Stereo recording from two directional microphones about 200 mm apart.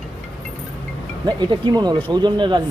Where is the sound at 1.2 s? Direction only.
20° right (ahead or behind).